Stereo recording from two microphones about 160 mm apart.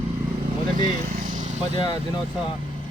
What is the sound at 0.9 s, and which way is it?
Vehicle, 60° right (ahead or behind).